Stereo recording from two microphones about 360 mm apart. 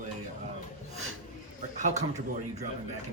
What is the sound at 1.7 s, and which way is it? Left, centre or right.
Speech, centre.